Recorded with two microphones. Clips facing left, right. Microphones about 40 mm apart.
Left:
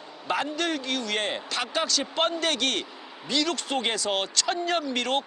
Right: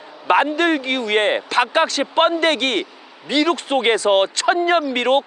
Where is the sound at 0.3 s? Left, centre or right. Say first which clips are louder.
Right 11 dB; right.